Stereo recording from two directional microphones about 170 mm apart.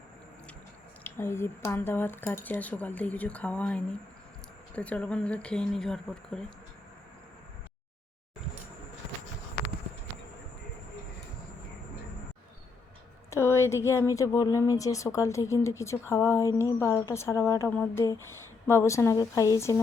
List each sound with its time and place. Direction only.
1.0 s speech: 15° left (ahead or behind)
13.3 s speech: 15° left (ahead or behind)